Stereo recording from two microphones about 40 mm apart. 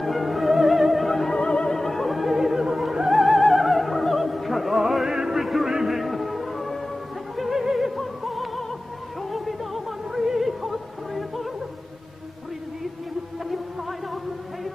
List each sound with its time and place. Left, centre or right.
0.0 s music: centre
1.3 s music: left
1.8 s opera: centre
5.9 s music: centre
7.3 s opera: centre
9.3 s music: centre